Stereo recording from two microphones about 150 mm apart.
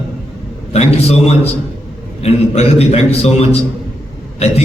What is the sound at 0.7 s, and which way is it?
Speech, 45° left (ahead or behind).